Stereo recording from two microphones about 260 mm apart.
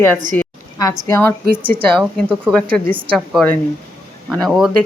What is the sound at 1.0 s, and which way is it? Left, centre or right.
A woman's voice, centre.